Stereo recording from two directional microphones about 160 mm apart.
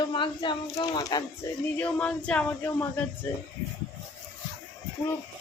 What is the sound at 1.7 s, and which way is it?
Speech, 10° left (ahead or behind).